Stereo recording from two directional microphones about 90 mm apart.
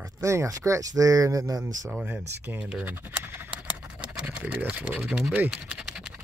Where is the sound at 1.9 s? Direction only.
20° right (ahead or behind).